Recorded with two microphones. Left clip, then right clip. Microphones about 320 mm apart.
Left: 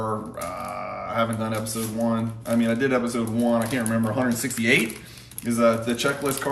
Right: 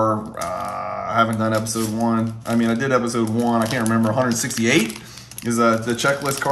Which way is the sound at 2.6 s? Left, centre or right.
Right.